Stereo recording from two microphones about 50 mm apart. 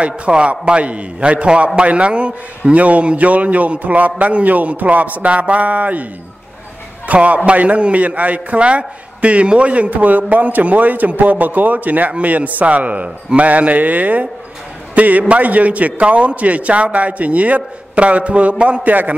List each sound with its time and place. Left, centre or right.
0.0 s a man's voice: right
7.1 s a man's voice: right